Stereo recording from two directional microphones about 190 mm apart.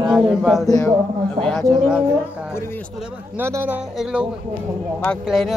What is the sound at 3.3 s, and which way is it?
A man's voice, 10° right (ahead or behind).